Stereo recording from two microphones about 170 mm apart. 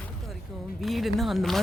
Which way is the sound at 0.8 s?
Centre (ahead or behind).